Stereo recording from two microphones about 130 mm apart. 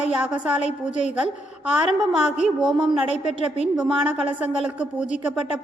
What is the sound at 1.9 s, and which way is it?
Speech, 5° right (ahead or behind).